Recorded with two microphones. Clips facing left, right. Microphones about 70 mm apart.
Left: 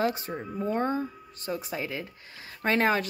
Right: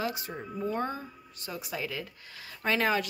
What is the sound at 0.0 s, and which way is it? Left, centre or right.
Speech, left.